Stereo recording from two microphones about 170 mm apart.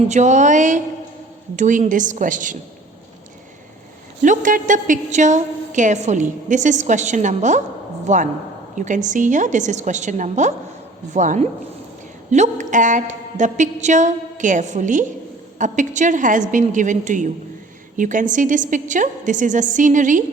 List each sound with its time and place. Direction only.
0.1 s a woman's voice: 45° right (ahead or behind)
4.2 s a woman's voice: 50° right (ahead or behind)